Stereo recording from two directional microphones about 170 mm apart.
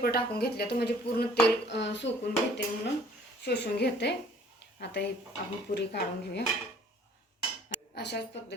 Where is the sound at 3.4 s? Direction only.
75° left (ahead or behind).